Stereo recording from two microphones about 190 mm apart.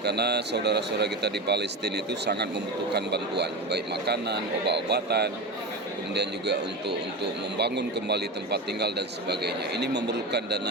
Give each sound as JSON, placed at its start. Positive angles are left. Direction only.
{"t": 0.0, "sound": "a man's voice", "side_deg": -60}